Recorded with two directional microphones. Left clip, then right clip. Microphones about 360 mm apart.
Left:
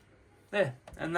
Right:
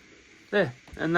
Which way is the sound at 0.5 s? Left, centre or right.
Centre.